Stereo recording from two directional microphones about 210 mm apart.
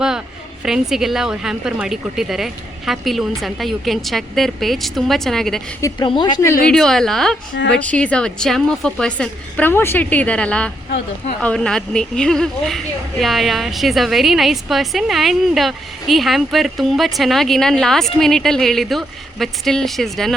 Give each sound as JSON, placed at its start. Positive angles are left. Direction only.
{"t": 0.6, "sound": "a woman's voice", "side_deg": 0}
{"t": 5.8, "sound": "a woman's voice", "side_deg": 20}
{"t": 6.7, "sound": "a woman's voice", "side_deg": 0}